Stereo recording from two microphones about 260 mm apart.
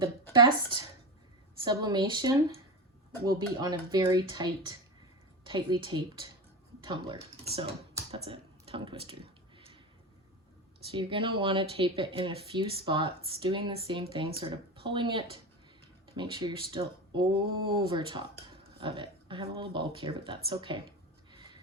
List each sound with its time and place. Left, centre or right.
0.3 s speech: centre
7.5 s computer keyboard: right
10.9 s speech: centre